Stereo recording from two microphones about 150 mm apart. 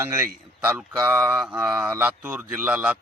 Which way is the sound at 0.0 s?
15° right (ahead or behind).